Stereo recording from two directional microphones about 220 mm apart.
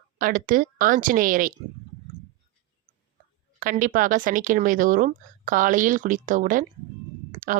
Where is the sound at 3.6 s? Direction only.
40° right (ahead or behind).